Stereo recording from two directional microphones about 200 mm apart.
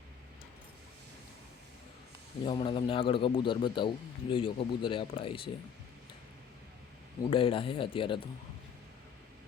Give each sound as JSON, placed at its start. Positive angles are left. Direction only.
{"t": 2.4, "sound": "a man's voice", "side_deg": 30}
{"t": 7.3, "sound": "a man's voice", "side_deg": 25}